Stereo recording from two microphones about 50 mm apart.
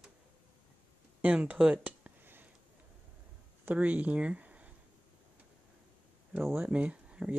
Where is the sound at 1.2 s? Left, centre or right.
Right.